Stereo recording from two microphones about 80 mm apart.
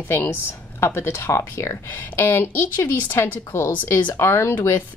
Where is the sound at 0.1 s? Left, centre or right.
Left.